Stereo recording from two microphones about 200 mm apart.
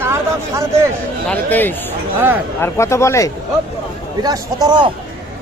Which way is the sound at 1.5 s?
10° left (ahead or behind).